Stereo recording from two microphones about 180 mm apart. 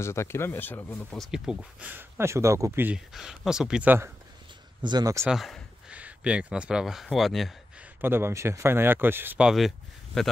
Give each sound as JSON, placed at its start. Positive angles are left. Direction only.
{"t": 0.0, "sound": "speech", "side_deg": 15}
{"t": 4.8, "sound": "speech", "side_deg": -20}
{"t": 5.2, "sound": "speech", "side_deg": 0}
{"t": 8.0, "sound": "speech", "side_deg": -15}